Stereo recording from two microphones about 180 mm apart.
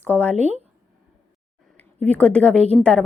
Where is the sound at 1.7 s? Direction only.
10° left (ahead or behind).